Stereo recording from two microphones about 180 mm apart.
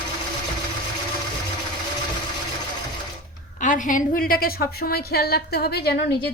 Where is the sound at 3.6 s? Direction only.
45° left (ahead or behind).